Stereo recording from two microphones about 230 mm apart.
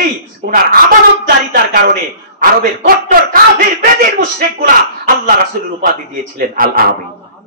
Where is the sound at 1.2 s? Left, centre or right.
Right.